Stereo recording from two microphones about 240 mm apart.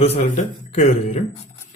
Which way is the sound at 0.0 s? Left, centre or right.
Left.